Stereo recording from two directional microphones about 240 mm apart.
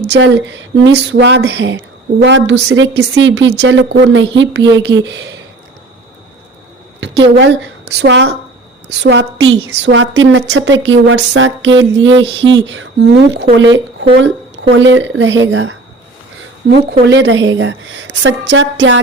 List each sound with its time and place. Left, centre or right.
0.1 s speech: right
7.3 s speech: right